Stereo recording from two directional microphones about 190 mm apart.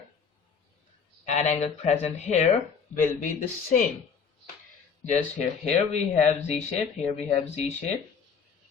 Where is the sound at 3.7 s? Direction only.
45° left (ahead or behind).